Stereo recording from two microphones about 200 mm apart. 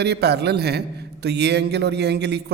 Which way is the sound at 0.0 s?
55° right (ahead or behind).